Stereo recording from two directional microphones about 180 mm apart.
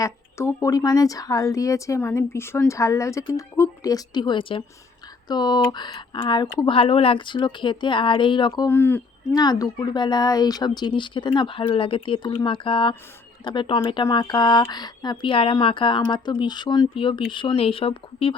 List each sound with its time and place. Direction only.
0.0 s a woman's voice: 15° left (ahead or behind)
8.6 s a woman's voice: 10° left (ahead or behind)
9.3 s speech: 20° left (ahead or behind)